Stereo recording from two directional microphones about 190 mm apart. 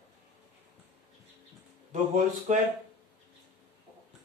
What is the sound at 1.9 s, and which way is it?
Speech, 35° right (ahead or behind).